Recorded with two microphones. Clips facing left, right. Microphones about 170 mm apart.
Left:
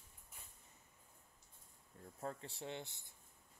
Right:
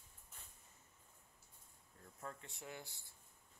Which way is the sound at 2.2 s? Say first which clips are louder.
Left 5 dB; 30° left (ahead or behind).